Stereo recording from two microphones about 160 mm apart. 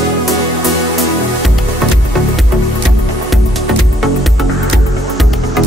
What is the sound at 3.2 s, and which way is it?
Music, centre (ahead or behind).